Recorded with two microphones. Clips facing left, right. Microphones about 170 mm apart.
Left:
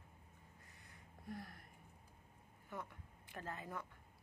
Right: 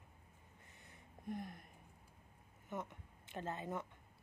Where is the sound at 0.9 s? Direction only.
20° right (ahead or behind).